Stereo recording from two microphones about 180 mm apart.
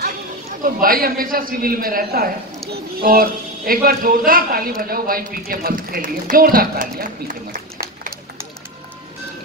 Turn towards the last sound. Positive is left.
turn(degrees=-50)  # may be behind; listen again after turning